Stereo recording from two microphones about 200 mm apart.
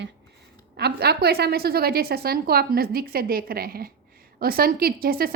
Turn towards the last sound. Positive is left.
turn(degrees=-50)  # may be behind; listen again after turning